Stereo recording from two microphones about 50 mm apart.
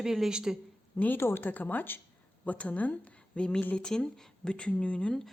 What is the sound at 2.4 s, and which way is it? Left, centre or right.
Speech, left.